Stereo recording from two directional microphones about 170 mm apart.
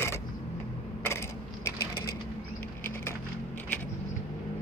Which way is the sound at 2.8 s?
15° left (ahead or behind).